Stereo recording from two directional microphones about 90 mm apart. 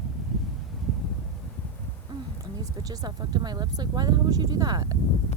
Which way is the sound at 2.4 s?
45° right (ahead or behind).